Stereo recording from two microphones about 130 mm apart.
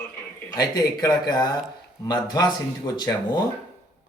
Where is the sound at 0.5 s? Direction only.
30° left (ahead or behind).